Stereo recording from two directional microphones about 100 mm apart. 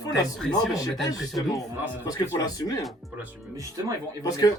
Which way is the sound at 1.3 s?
35° left (ahead or behind).